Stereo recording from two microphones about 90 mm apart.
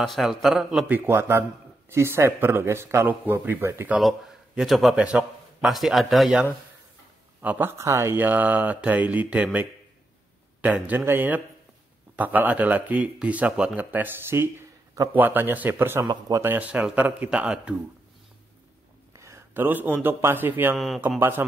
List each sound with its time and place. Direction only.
0.0 s a man's voice: centre (ahead or behind)
0.8 s speech: 20° right (ahead or behind)
4.0 s a man's voice: centre (ahead or behind)
4.9 s a man's voice: 10° right (ahead or behind)
5.7 s a man's voice: centre (ahead or behind)
7.4 s a man's voice: 20° right (ahead or behind)
16.0 s speech: 40° right (ahead or behind)
16.4 s speech: 15° right (ahead or behind)
19.1 s a sound: 35° right (ahead or behind)
19.6 s speech: 20° right (ahead or behind)
20.7 s a man's voice: centre (ahead or behind)
21.2 s speech: 25° right (ahead or behind)